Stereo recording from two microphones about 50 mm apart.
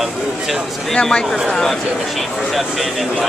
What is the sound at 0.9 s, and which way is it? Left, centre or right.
Speech, centre.